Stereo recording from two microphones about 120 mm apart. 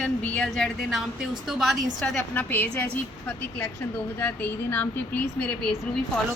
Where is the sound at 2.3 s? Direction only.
15° left (ahead or behind).